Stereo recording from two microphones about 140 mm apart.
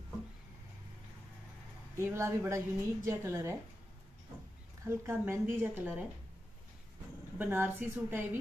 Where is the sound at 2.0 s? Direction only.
20° right (ahead or behind).